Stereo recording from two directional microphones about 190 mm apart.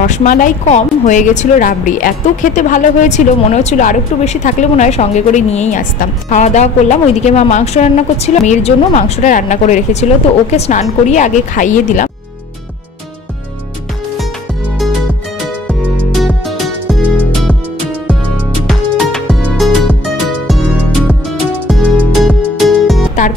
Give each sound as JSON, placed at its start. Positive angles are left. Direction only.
{"t": 0.0, "sound": "speech", "side_deg": 40}
{"t": 16.1, "sound": "music", "side_deg": 0}
{"t": 18.7, "sound": "music", "side_deg": 0}
{"t": 21.6, "sound": "music", "side_deg": 5}